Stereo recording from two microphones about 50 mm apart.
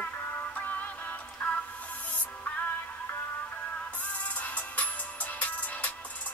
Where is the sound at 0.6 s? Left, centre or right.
Left.